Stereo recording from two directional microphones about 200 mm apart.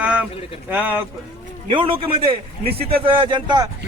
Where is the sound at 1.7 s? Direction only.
25° right (ahead or behind).